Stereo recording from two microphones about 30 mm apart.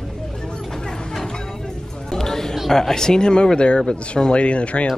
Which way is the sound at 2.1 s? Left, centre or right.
Centre.